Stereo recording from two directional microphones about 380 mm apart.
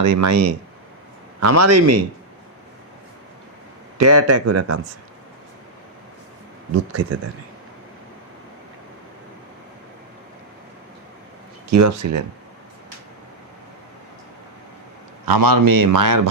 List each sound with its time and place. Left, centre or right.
0.0 s speech: right
3.9 s speech: right
6.7 s speech: right
11.7 s speech: right
15.3 s speech: right